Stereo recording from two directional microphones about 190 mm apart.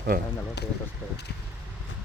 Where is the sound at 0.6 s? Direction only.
60° left (ahead or behind).